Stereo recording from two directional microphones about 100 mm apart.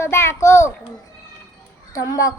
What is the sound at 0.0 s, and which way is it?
Speech, 25° left (ahead or behind).